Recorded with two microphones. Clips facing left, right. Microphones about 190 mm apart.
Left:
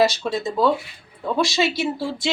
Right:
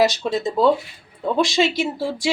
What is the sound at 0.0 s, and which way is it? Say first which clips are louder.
Speech: right 1 dB; 20° right (ahead or behind).